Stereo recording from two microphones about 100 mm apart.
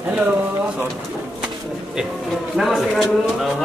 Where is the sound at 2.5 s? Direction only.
Centre (ahead or behind).